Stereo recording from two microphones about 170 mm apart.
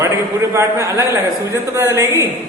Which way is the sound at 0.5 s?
15° right (ahead or behind).